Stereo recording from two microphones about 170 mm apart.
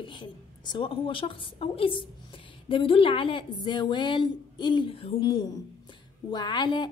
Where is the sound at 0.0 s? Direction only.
30° left (ahead or behind).